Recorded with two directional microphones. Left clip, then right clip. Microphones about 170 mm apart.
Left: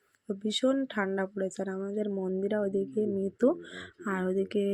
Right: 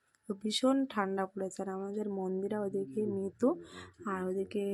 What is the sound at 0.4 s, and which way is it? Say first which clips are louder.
A woman's voice: left 2 dB; 5° left (ahead or behind).